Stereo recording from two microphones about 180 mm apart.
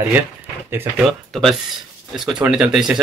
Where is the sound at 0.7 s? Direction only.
10° right (ahead or behind).